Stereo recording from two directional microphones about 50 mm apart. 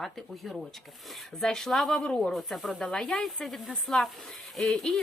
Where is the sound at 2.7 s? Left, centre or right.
Centre.